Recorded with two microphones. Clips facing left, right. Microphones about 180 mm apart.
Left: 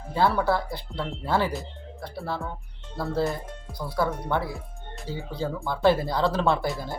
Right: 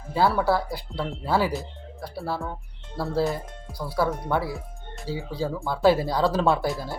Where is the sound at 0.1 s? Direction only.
5° right (ahead or behind).